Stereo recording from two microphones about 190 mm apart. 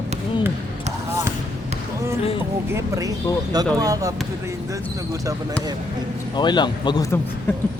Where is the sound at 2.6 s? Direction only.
15° right (ahead or behind).